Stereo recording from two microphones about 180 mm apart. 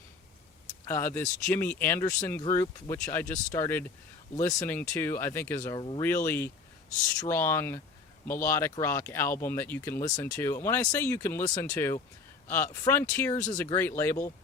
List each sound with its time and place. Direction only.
0.9 s speech: 15° left (ahead or behind)
6.0 s speech: 15° left (ahead or behind)